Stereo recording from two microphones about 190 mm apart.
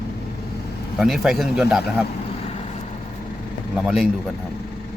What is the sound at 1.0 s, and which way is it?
Speech, centre (ahead or behind).